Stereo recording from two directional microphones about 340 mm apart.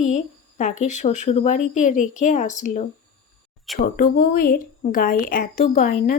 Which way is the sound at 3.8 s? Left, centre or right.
Left.